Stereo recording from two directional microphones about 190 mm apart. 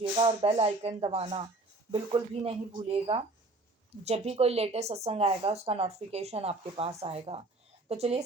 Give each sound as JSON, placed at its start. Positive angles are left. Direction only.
{"t": 0.0, "sound": "speech", "side_deg": -30}